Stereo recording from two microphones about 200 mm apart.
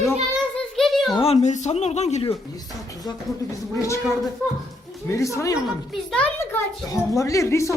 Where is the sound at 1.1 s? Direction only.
30° left (ahead or behind).